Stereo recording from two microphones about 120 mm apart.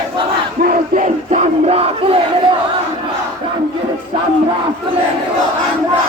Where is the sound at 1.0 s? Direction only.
70° right (ahead or behind); by 2.2 s 55° right (ahead or behind).